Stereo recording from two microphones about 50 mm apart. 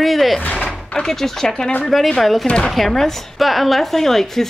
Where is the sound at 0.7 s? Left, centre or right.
Centre.